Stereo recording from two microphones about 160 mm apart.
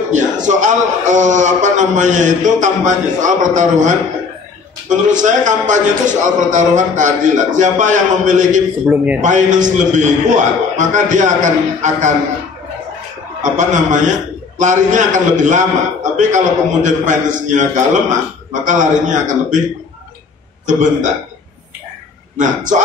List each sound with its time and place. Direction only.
0.1 s a man's voice: 50° right (ahead or behind)
8.8 s a man's voice: 10° right (ahead or behind)
9.2 s a man's voice: 50° right (ahead or behind)
13.4 s a man's voice: 50° right (ahead or behind)
20.6 s a man's voice: 50° right (ahead or behind)
22.4 s a man's voice: 55° right (ahead or behind)